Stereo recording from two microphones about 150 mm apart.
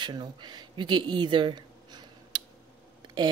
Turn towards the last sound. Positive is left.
turn(degrees=-25)  # may be behind; listen again after turning